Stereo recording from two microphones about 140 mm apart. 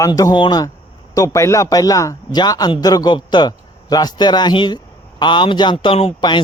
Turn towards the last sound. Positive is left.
turn(degrees=35)  # may be behind; listen again after turning